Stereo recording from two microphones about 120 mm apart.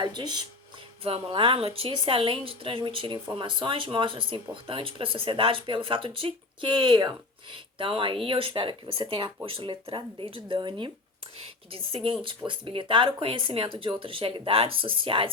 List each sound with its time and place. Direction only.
0.0 s speech: 40° right (ahead or behind)
1.0 s speech: 50° right (ahead or behind)